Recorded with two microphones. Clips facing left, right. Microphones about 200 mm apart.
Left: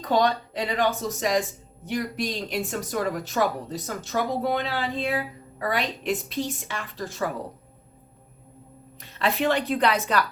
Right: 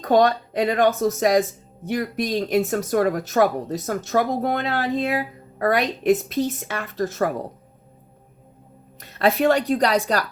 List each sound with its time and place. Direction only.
0.0 s speech: 50° right (ahead or behind)
9.0 s a woman's voice: 45° right (ahead or behind)